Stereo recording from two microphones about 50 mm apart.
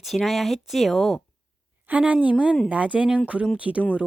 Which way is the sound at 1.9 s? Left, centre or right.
Right.